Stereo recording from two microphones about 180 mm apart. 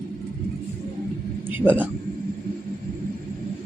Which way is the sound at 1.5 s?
10° right (ahead or behind).